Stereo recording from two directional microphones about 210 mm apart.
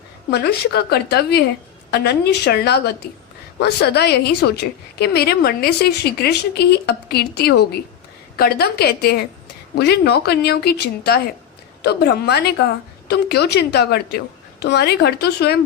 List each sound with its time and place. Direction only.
0.3 s a woman's voice: 50° left (ahead or behind)